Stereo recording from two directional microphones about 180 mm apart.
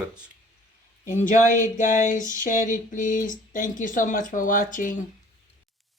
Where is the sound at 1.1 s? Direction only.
45° left (ahead or behind).